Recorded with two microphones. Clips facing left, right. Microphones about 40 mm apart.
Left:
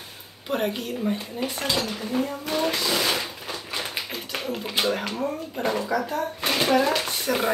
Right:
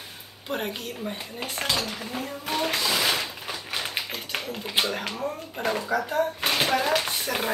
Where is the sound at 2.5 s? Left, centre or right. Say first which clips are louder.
Left 1 dB; centre.